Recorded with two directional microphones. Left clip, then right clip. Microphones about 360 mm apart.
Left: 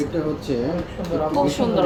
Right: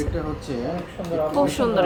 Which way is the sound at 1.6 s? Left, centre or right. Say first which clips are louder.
Even; centre.